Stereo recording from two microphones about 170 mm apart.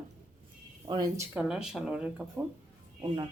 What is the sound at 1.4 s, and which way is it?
Speech, 5° right (ahead or behind).